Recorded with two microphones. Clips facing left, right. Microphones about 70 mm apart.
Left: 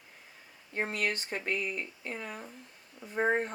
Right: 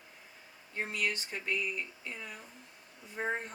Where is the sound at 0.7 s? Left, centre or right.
Left.